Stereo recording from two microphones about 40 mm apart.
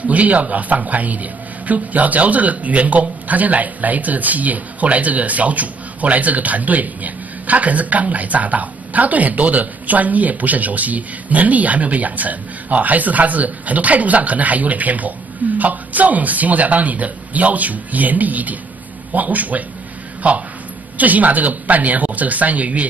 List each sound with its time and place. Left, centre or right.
0.0 s a man's voice: right